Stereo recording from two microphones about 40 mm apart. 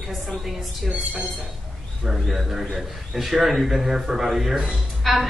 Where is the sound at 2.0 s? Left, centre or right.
Centre.